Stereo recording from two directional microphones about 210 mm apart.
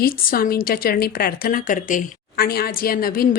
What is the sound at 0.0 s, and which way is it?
A woman's voice, 45° left (ahead or behind).